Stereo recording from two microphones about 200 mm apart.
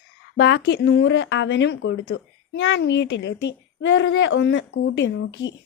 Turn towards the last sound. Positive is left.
turn(degrees=65)  # may be behind; listen again after turning